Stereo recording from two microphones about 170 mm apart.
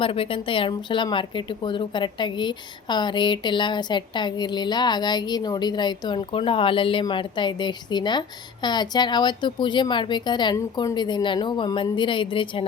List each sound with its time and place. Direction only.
0.0 s a woman's voice: 30° left (ahead or behind)